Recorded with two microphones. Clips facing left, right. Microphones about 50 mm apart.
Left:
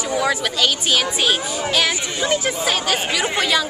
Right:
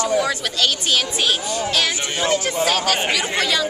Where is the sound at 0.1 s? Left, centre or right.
Centre.